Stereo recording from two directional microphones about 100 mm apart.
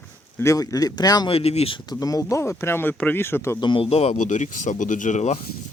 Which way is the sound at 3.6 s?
60° left (ahead or behind).